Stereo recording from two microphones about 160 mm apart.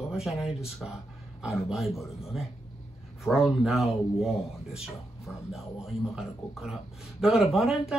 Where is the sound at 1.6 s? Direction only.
Centre (ahead or behind).